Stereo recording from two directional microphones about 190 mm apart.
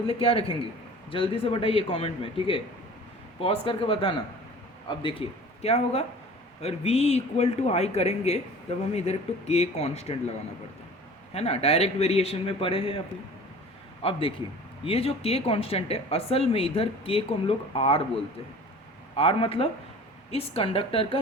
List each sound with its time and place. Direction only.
0.1 s a man's voice: 30° left (ahead or behind)
11.3 s speech: 30° left (ahead or behind)
14.0 s a man's voice: 30° left (ahead or behind)
19.1 s a man's voice: 30° left (ahead or behind)